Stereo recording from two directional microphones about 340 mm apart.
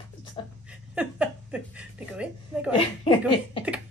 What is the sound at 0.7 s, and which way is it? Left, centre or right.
Speech, centre.